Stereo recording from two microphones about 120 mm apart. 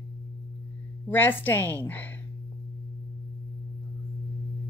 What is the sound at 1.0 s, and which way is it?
A woman's voice, 15° left (ahead or behind).